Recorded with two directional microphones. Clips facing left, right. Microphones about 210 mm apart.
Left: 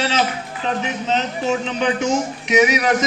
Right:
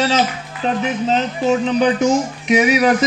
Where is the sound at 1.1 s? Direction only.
35° right (ahead or behind).